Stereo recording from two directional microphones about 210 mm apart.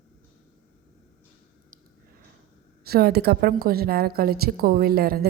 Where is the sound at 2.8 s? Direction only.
50° right (ahead or behind).